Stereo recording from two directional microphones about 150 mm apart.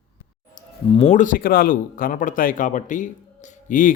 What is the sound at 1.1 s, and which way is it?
Speech, 60° left (ahead or behind).